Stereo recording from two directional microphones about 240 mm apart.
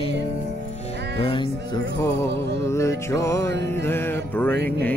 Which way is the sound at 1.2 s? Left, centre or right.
Centre.